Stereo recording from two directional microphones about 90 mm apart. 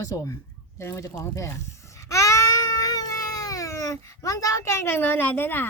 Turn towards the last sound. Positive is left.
turn(degrees=20)  # may be behind; listen again after turning